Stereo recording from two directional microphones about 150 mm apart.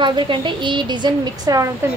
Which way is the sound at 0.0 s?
30° right (ahead or behind).